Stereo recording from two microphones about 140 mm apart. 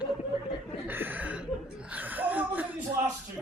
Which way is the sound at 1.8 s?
10° right (ahead or behind).